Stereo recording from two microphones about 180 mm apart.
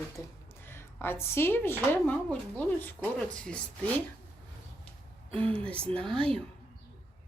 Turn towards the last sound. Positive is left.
turn(degrees=5)  # may be behind; listen again after turning